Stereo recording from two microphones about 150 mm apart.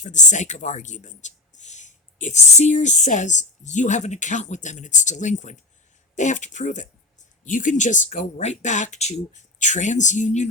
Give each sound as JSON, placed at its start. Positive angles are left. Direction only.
{"t": 0.0, "sound": "speech", "side_deg": 55}